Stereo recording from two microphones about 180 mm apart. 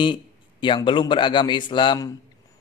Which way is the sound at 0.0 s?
25° left (ahead or behind).